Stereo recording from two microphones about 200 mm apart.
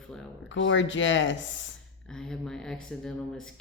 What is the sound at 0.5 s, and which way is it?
A woman's voice, 70° left (ahead or behind).